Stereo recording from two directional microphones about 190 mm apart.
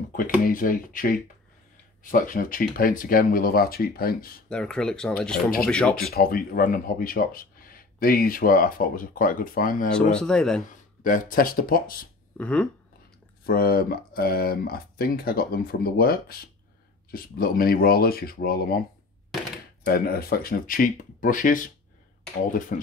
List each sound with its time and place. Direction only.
0.5 s speech: 45° left (ahead or behind)
4.5 s speech: 5° left (ahead or behind)
6.1 s speech: 50° left (ahead or behind)
10.1 s speech: 5° left (ahead or behind)
10.6 s speech: 45° left (ahead or behind)
12.4 s speech: 5° left (ahead or behind)
13.5 s speech: 50° left (ahead or behind)
19.8 s speech: 55° left (ahead or behind)
22.7 s speech: 45° left (ahead or behind)